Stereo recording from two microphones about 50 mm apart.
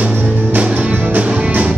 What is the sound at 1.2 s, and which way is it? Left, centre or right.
Music, right.